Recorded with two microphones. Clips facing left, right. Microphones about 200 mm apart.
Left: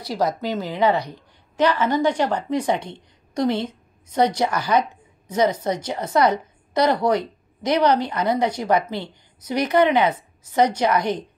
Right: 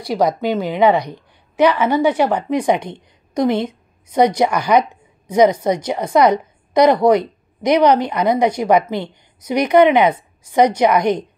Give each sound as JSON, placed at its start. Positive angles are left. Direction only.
{"t": 0.2, "sound": "a woman's voice", "side_deg": -15}